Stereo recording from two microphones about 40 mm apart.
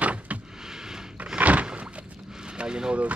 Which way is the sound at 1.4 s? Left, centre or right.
Right.